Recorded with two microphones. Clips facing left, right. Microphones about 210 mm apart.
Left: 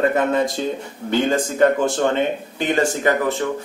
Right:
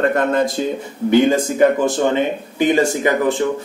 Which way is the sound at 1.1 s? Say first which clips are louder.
Right 5 dB; 10° right (ahead or behind).